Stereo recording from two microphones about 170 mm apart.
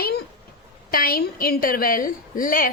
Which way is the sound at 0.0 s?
70° left (ahead or behind).